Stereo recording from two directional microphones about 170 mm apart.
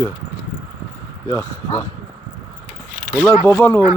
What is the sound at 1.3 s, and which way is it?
Speech, 15° left (ahead or behind).